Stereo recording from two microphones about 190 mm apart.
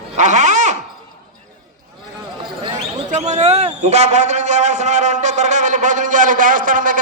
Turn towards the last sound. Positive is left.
turn(degrees=-45)  # may be behind; listen again after turning